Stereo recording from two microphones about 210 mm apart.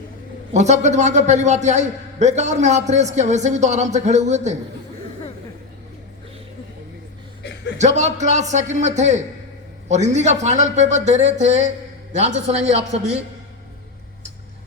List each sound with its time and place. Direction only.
0.5 s a man's voice: 35° right (ahead or behind)
7.8 s a man's voice: 35° right (ahead or behind)